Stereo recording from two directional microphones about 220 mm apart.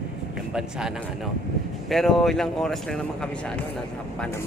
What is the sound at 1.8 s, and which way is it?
Speech, centre (ahead or behind).